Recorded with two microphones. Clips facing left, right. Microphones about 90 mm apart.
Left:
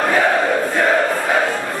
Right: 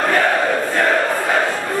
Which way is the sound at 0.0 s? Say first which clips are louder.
Left 1 dB; 5° left (ahead or behind).